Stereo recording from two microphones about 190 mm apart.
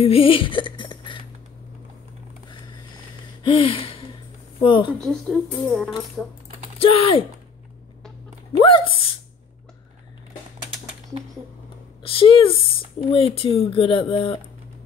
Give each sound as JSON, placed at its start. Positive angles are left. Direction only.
{"t": 0.0, "sound": "music", "side_deg": 30}
{"t": 3.4, "sound": "gasp", "side_deg": 30}
{"t": 4.6, "sound": "speech", "side_deg": 25}
{"t": 5.0, "sound": "speech", "side_deg": 0}
{"t": 6.8, "sound": "speech", "side_deg": 30}
{"t": 8.6, "sound": "speech", "side_deg": 30}
{"t": 12.0, "sound": "speech", "side_deg": 30}